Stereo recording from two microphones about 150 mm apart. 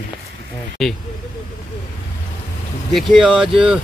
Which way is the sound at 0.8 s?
Centre (ahead or behind).